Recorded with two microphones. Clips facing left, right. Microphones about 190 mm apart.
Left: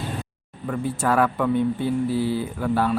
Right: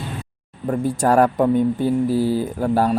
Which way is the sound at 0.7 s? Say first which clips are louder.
Right 5 dB; 40° right (ahead or behind).